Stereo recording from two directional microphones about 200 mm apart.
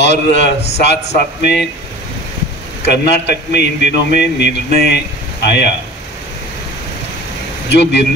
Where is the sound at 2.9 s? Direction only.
55° left (ahead or behind).